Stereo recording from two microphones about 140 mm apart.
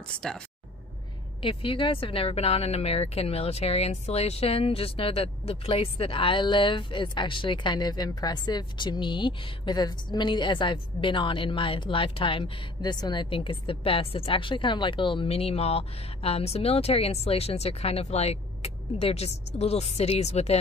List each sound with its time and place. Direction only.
0.1 s speech: 5° left (ahead or behind)
1.4 s speech: 40° left (ahead or behind)